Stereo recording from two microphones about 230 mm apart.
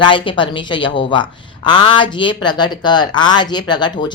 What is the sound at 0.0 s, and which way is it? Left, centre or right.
Speech, left.